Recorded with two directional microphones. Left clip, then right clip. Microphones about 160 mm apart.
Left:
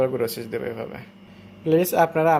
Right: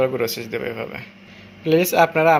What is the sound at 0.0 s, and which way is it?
Speech, 10° left (ahead or behind).